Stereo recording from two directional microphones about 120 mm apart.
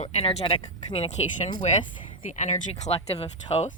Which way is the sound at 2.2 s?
90° left.